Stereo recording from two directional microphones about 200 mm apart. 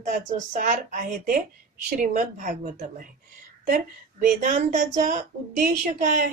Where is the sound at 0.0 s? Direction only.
40° right (ahead or behind).